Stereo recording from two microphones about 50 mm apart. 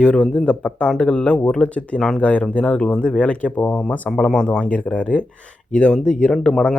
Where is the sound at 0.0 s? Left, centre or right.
Centre.